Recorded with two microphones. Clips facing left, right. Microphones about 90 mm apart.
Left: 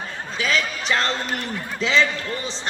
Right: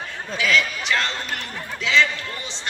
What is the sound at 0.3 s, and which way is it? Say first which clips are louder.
Basketball bounce: right 2 dB; 35° left (ahead or behind).